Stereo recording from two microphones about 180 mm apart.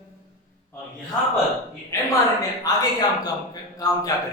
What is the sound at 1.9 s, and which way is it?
A man's voice, 15° left (ahead or behind).